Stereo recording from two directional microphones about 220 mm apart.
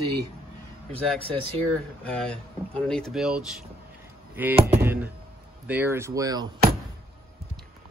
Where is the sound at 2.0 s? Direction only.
5° left (ahead or behind); by 6.5 s 15° right (ahead or behind).